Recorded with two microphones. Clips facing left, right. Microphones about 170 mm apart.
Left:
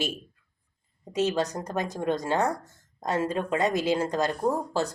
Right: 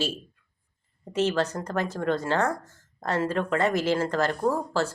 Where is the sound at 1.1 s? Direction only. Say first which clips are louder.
Right 1 dB; 15° left (ahead or behind).